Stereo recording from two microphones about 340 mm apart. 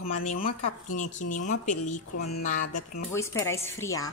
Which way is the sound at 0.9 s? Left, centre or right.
Left.